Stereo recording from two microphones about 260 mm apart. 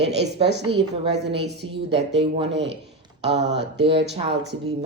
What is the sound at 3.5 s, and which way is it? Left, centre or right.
Speech, right.